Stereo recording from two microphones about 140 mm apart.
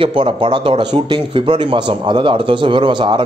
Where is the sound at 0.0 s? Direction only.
40° right (ahead or behind).